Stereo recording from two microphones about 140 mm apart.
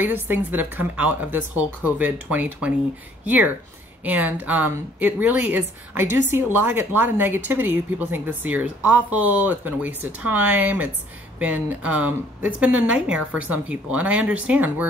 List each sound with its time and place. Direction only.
0.0 s a woman's voice: 15° right (ahead or behind)